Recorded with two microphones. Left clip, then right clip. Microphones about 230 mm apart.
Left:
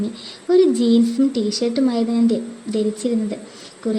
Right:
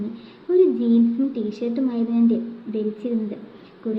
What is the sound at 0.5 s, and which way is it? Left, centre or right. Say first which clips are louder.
A woman's voice: left 3 dB; left.